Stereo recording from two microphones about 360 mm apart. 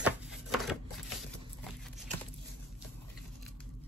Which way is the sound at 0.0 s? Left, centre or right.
Centre.